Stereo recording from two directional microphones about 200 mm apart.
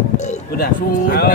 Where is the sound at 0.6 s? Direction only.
50° left (ahead or behind).